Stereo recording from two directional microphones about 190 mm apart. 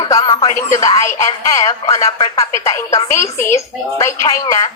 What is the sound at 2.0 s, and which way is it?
A woman's voice, 25° left (ahead or behind).